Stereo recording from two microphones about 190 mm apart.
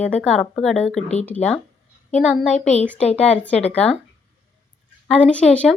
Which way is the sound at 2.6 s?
35° left (ahead or behind).